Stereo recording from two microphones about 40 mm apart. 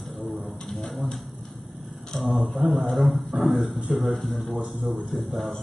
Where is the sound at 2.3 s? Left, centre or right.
Right.